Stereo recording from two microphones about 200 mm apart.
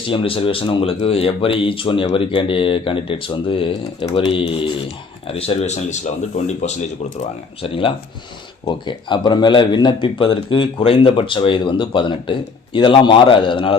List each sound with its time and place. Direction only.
0.1 s speech: 25° left (ahead or behind)